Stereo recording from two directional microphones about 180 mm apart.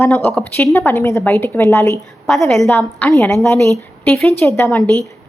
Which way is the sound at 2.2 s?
Centre (ahead or behind).